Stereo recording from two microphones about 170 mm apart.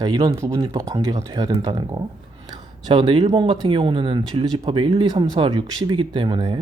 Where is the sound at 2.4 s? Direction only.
30° right (ahead or behind).